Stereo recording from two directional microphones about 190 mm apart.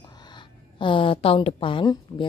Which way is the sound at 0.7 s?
25° left (ahead or behind).